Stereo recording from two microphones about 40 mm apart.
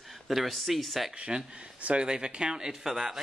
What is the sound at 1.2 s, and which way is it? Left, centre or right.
Speech, right.